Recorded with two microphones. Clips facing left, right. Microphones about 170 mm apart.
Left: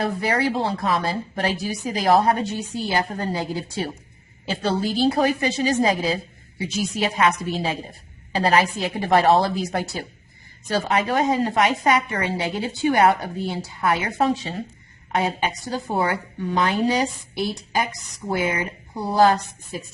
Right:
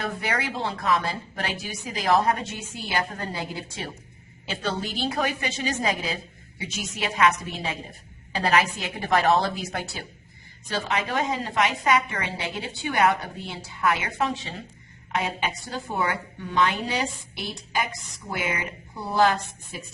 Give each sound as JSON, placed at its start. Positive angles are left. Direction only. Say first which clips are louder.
{"t": 0.0, "sound": "a woman's voice", "louder": "left 7 dB", "side_deg": 35}